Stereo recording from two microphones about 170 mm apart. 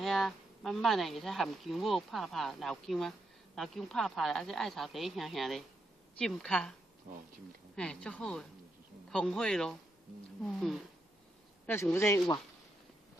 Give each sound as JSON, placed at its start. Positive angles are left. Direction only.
{"t": 0.0, "sound": "speech", "side_deg": 0}
{"t": 7.7, "sound": "speech", "side_deg": 5}
{"t": 11.6, "sound": "a man's voice", "side_deg": 15}